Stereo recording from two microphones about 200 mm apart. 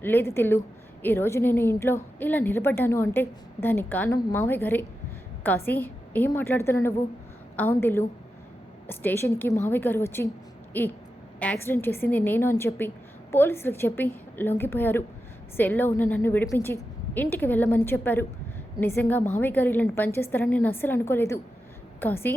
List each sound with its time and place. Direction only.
0.0 s a woman's voice: 10° left (ahead or behind)
11.3 s a woman's voice: 5° left (ahead or behind)